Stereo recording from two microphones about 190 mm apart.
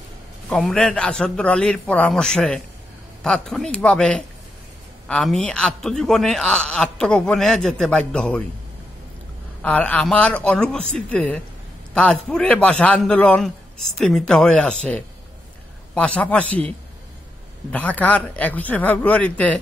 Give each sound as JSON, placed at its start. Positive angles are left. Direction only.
{"t": 0.5, "sound": "a man's voice", "side_deg": 0}
{"t": 9.6, "sound": "a man's voice", "side_deg": 10}